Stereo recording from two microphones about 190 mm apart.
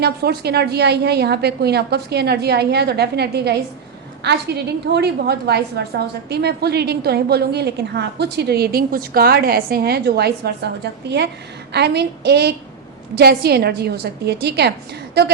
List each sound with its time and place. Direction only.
0.0 s a woman's voice: 60° right (ahead or behind)